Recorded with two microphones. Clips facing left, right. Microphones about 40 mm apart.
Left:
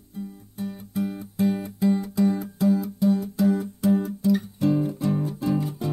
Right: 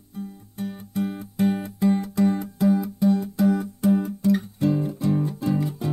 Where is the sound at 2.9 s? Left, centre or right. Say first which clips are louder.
Right 1 dB; centre.